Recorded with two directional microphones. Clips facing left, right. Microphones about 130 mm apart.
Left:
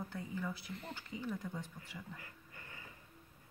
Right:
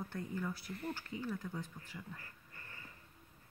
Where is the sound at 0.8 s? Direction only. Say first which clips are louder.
Right 4 dB; 20° left (ahead or behind).